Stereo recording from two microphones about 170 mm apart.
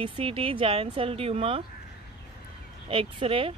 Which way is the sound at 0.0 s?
30° right (ahead or behind).